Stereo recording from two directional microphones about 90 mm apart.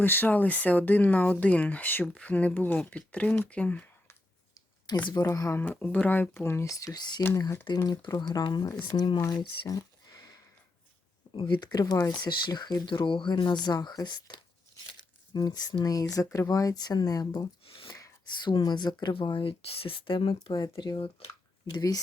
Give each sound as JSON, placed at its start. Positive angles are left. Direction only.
{"t": 0.0, "sound": "speech", "side_deg": 20}
{"t": 5.0, "sound": "speech", "side_deg": 50}
{"t": 5.3, "sound": "speech", "side_deg": 35}
{"t": 5.6, "sound": "speech", "side_deg": 20}
{"t": 7.7, "sound": "speech", "side_deg": 50}
{"t": 11.3, "sound": "speech", "side_deg": 65}
{"t": 17.7, "sound": "a sound", "side_deg": 90}
{"t": 18.4, "sound": "speech", "side_deg": 50}
{"t": 19.1, "sound": "speech", "side_deg": 70}
{"t": 20.7, "sound": "speech", "side_deg": 55}
{"t": 21.2, "sound": "speech", "side_deg": 90}
{"t": 21.7, "sound": "speech", "side_deg": 45}